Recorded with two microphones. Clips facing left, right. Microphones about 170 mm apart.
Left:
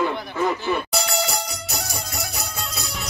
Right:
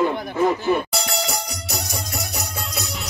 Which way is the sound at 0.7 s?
40° right (ahead or behind).